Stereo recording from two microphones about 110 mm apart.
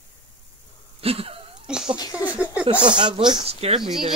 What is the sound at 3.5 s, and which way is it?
Speech, 65° right (ahead or behind).